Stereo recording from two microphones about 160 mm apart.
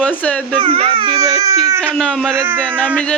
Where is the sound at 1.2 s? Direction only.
20° right (ahead or behind).